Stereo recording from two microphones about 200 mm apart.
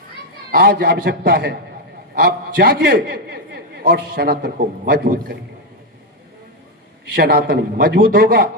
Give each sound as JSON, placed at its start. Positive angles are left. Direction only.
{"t": 0.5, "sound": "a man's voice", "side_deg": -50}
{"t": 7.2, "sound": "a man's voice", "side_deg": -50}